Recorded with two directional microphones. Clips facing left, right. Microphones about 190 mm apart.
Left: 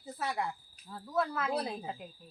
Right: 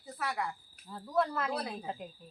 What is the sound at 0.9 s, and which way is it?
Speech, 5° left (ahead or behind).